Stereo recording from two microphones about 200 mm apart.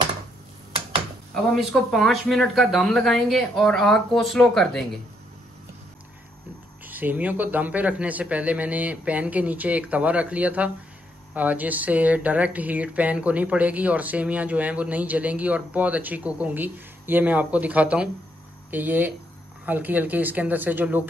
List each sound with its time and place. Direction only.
1.3 s speech: centre (ahead or behind)
6.8 s speech: 10° right (ahead or behind)